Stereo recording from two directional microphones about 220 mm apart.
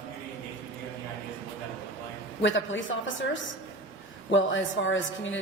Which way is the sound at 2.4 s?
60° left (ahead or behind).